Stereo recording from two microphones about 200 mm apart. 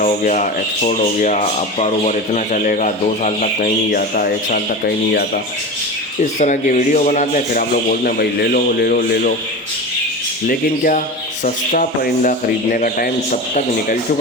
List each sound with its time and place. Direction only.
0.0 s speech: 40° left (ahead or behind)
6.4 s speech: 35° left (ahead or behind)
10.5 s speech: 45° left (ahead or behind)